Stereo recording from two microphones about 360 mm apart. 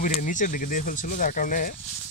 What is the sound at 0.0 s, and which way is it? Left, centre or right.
Speech, left.